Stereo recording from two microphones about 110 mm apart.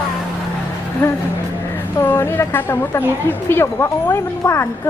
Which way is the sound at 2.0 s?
20° left (ahead or behind).